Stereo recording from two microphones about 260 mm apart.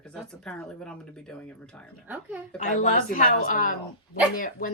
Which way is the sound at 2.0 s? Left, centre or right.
Centre.